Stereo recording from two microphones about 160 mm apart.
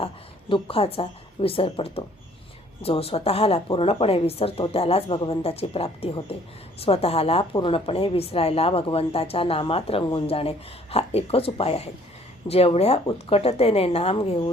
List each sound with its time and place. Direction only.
0.0 s a woman's voice: 35° left (ahead or behind)